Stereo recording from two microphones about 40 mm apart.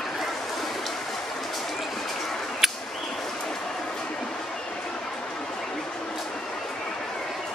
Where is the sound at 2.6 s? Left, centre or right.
Centre.